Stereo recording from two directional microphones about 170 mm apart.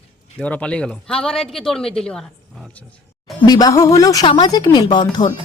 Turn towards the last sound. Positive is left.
turn(degrees=25)  # may be behind; listen again after turning